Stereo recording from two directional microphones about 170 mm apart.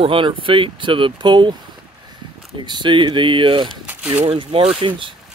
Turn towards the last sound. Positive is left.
turn(degrees=-30)  # may be behind; listen again after turning